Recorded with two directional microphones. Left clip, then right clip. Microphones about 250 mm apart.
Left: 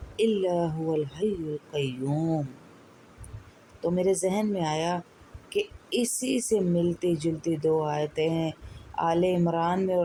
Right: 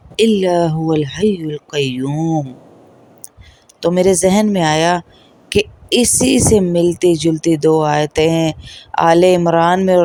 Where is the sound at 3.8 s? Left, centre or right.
Right.